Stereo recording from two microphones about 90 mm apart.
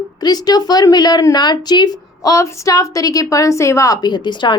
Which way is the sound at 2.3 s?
35° left (ahead or behind).